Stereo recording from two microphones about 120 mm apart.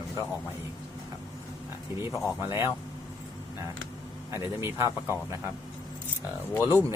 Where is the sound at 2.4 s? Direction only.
20° right (ahead or behind).